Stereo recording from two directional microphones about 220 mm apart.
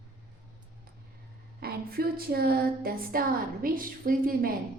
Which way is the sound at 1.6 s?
45° right (ahead or behind).